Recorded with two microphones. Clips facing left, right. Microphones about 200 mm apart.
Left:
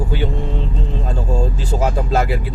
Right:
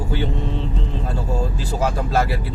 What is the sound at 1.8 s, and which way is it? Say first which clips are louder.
Speech: left 2 dB; 20° left (ahead or behind).